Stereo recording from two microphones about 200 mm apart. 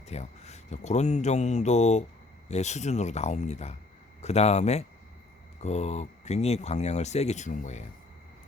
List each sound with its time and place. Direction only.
0.1 s speech: 35° left (ahead or behind)